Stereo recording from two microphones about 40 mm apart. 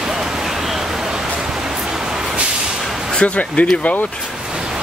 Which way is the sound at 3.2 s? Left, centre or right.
Left.